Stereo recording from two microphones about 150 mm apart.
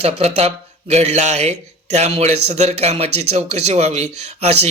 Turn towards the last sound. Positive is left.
turn(degrees=-45)  # may be behind; listen again after turning